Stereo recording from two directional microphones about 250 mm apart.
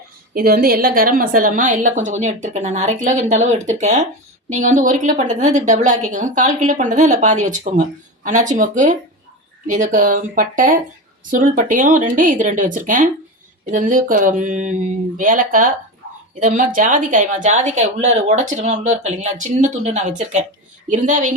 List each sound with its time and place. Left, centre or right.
0.3 s a woman's voice: right